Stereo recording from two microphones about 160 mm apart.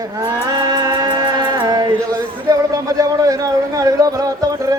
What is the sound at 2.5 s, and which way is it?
Speech, 20° right (ahead or behind).